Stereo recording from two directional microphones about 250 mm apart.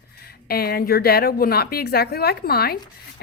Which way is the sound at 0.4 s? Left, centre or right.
Left.